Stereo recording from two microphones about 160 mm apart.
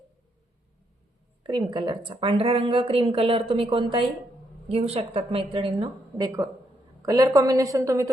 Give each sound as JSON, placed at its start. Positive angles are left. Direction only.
{"t": 1.5, "sound": "a woman's voice", "side_deg": -25}